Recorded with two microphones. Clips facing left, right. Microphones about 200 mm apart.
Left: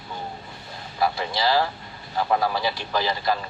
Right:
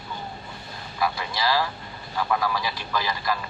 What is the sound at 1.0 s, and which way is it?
Speech, 30° left (ahead or behind).